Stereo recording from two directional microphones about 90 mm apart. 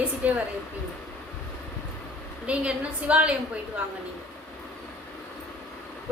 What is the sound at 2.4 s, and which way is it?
Speech, 15° right (ahead or behind).